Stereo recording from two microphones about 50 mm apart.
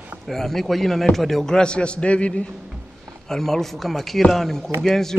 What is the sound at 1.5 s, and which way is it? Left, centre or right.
Speech, centre.